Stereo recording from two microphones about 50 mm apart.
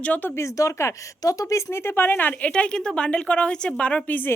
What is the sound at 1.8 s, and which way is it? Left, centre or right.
Speech, left.